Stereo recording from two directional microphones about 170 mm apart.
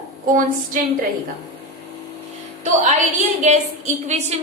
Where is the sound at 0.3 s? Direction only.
50° right (ahead or behind).